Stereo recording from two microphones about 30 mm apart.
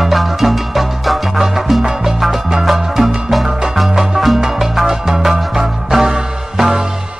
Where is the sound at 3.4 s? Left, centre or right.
Centre.